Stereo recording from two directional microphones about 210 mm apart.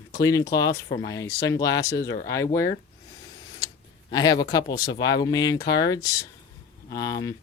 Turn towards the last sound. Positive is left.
turn(degrees=15)  # may be behind; listen again after turning